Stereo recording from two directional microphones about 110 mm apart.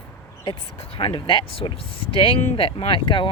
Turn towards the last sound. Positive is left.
turn(degrees=50)  # may be behind; listen again after turning